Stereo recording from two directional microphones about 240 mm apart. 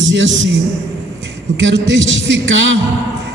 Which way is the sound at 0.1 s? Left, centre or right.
Right.